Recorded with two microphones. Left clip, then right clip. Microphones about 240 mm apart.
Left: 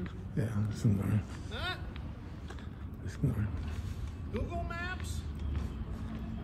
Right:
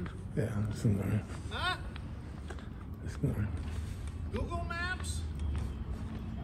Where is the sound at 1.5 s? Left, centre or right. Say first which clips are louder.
Right 4 dB; right.